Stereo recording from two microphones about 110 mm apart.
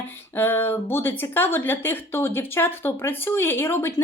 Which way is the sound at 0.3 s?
20° left (ahead or behind).